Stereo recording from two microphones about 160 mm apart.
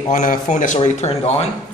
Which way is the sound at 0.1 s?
50° left (ahead or behind).